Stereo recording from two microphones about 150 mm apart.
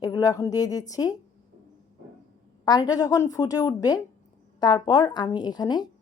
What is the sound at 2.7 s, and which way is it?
A woman's voice, 25° left (ahead or behind).